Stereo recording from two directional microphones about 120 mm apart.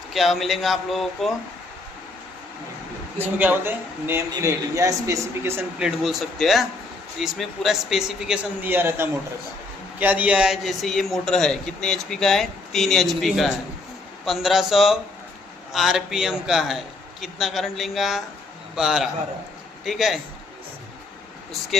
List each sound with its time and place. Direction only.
0.1 s a man's voice: centre (ahead or behind)
3.2 s speech: 15° right (ahead or behind)
5.8 s a man's voice: centre (ahead or behind)
8.6 s a man's voice: 15° right (ahead or behind); by 20.1 s centre (ahead or behind)